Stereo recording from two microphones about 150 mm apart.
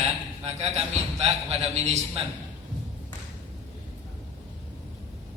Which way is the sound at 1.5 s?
45° right (ahead or behind).